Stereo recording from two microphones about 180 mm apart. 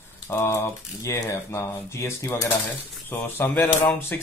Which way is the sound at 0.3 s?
15° left (ahead or behind).